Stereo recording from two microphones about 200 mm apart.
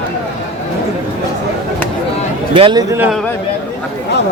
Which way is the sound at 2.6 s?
25° right (ahead or behind).